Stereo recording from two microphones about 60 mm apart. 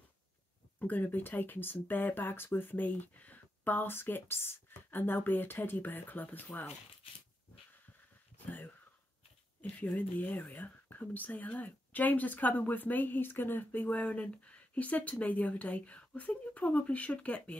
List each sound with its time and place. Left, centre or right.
0.7 s speech: left
8.5 s a sound: left
9.9 s speech: left